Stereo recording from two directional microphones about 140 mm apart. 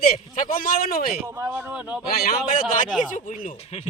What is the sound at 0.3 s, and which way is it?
Speech, 80° left.